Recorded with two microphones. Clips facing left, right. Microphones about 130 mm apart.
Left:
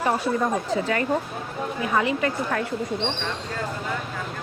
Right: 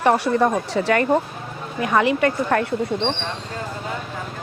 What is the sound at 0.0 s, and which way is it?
Speech, 75° right (ahead or behind).